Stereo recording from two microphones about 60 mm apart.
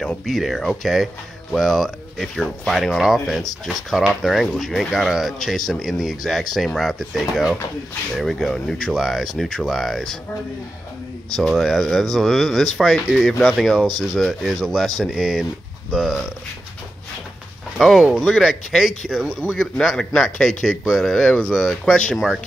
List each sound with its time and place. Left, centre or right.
0.2 s speech: centre
11.2 s speech: centre
17.8 s speech: centre
20.2 s speech: centre
22.1 s speech: centre